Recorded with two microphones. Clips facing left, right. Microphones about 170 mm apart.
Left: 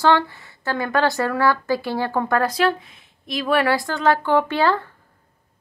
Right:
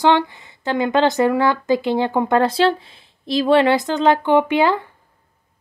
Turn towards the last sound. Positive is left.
turn(degrees=-15)  # may be behind; listen again after turning